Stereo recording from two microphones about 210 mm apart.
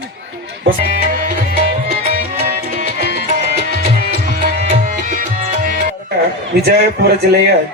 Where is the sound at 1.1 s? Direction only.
45° right (ahead or behind).